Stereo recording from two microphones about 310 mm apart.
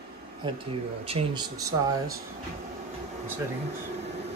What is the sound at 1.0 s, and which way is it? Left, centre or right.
Speech, centre.